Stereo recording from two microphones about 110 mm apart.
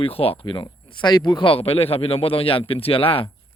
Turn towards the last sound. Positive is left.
turn(degrees=60)  # may be behind; listen again after turning